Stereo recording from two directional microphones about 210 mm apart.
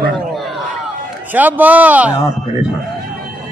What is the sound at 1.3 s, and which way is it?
Speech, 10° right (ahead or behind).